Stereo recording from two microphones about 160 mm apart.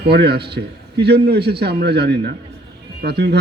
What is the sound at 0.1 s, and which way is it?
A man's voice, 90° right.